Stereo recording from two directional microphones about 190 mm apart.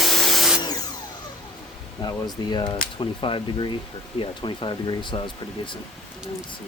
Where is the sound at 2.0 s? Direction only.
25° left (ahead or behind).